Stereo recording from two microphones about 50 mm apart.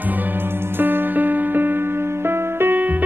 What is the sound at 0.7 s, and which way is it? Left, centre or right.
Music, right.